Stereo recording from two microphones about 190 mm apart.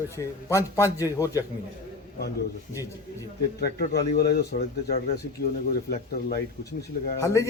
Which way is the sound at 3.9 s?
55° left (ahead or behind).